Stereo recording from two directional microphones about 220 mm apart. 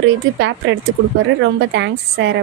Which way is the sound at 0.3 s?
55° right (ahead or behind).